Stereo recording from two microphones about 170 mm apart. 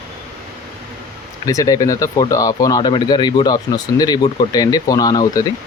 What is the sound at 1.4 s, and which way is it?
Speech, 20° left (ahead or behind).